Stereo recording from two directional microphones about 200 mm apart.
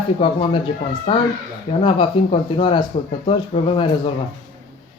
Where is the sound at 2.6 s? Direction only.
25° left (ahead or behind).